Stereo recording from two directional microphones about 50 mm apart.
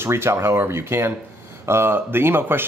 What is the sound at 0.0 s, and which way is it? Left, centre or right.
Speech, right.